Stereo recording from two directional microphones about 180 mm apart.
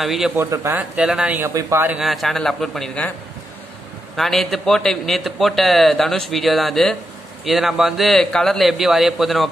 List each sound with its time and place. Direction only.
0.0 s a man's voice: centre (ahead or behind)
0.4 s speech: 15° right (ahead or behind)
2.0 s a man's voice: centre (ahead or behind)
4.2 s a man's voice: centre (ahead or behind)